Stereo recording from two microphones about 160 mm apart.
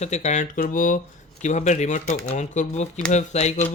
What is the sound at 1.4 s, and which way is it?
Speech, 45° left (ahead or behind).